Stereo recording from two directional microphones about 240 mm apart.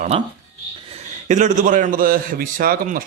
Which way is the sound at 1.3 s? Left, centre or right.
Right.